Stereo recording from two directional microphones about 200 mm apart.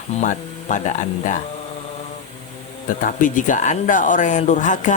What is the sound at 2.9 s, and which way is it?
Speech, 40° left (ahead or behind).